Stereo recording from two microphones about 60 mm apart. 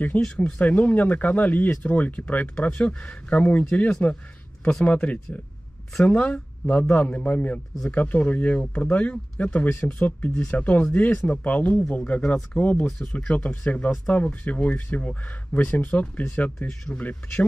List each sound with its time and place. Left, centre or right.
0.2 s speech: centre
16.6 s speech: centre
17.0 s speech: left